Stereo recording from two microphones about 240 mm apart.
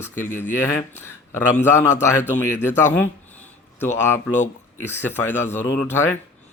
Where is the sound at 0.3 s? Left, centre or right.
Centre.